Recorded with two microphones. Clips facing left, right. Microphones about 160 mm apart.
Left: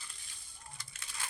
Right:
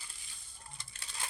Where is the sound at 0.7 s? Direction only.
35° right (ahead or behind).